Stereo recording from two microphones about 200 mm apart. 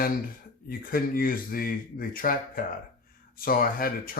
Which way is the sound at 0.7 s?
45° left (ahead or behind).